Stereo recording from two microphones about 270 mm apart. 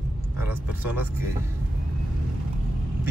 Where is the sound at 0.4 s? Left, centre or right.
Centre.